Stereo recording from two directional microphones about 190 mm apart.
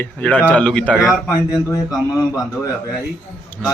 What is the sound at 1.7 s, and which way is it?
Speech, 20° left (ahead or behind).